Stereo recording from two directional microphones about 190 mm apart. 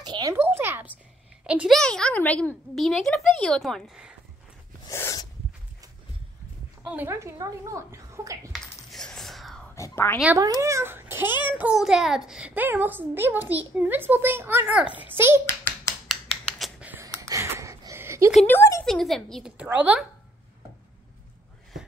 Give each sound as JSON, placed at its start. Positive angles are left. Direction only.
{"t": 0.0, "sound": "a sound", "side_deg": -20}
{"t": 1.4, "sound": "a woman's voice", "side_deg": -5}
{"t": 4.8, "sound": "a sound", "side_deg": 15}
{"t": 6.9, "sound": "a child's voice", "side_deg": -10}
{"t": 8.5, "sound": "coin", "side_deg": 0}
{"t": 9.8, "sound": "a woman's voice", "side_deg": 15}
{"t": 10.4, "sound": "a child's voice", "side_deg": -15}
{"t": 16.1, "sound": "finger snapping", "side_deg": 0}
{"t": 17.2, "sound": "a sound", "side_deg": -15}
{"t": 18.5, "sound": "speech", "side_deg": 15}
{"t": 18.9, "sound": "a woman's voice", "side_deg": 0}